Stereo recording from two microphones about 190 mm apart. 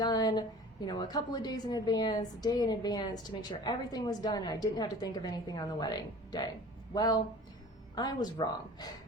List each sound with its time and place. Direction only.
0.0 s a woman's voice: 20° left (ahead or behind)
6.9 s a woman's voice: 20° left (ahead or behind)